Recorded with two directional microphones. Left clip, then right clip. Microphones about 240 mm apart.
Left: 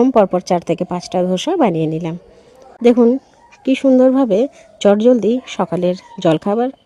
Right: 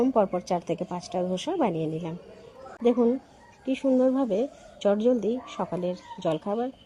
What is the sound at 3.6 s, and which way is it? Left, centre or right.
A woman's voice, left.